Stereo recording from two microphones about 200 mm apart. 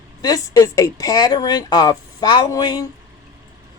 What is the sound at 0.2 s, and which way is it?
Speech, 15° left (ahead or behind).